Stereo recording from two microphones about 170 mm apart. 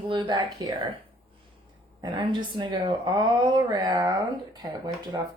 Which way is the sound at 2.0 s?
25° right (ahead or behind).